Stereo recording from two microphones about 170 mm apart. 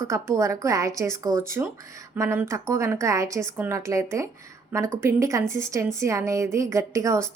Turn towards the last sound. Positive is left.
turn(degrees=-15)  # may be behind; listen again after turning